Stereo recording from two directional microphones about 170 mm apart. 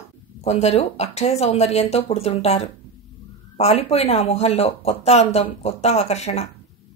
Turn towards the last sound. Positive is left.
turn(degrees=40)  # may be behind; listen again after turning